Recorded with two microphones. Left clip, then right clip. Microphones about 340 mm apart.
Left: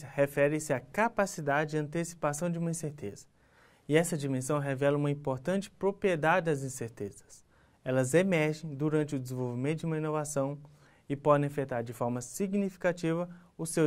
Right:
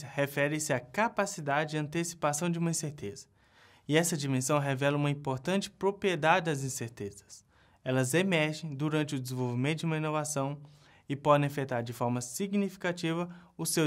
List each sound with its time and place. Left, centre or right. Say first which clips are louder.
0.0 s speech: left 3 dB; right